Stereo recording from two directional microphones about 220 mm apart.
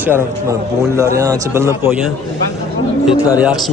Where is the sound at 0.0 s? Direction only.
10° right (ahead or behind).